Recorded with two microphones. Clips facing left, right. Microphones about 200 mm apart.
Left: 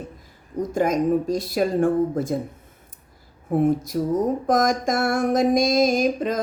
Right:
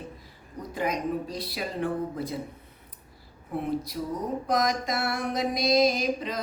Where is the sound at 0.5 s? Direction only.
45° left (ahead or behind).